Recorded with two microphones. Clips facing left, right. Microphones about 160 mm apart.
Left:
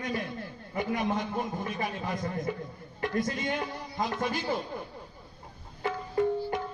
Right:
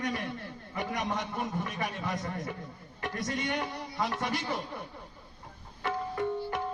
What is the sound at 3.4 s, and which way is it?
Speech, 75° right (ahead or behind).